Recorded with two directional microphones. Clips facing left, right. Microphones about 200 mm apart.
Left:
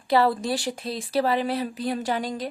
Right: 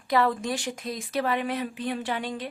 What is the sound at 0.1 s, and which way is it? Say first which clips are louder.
A woman's voice: left 3 dB; 35° left (ahead or behind).